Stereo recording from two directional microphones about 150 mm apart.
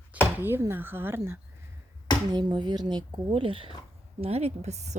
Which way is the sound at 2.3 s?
30° right (ahead or behind).